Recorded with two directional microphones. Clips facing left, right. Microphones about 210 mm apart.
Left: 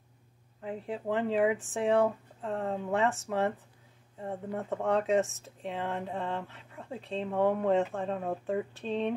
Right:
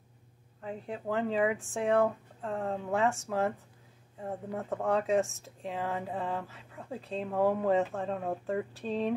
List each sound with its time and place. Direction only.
0.6 s speech: 5° left (ahead or behind)